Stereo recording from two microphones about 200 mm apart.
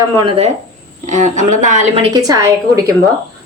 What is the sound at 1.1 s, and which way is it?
Speech, 35° right (ahead or behind).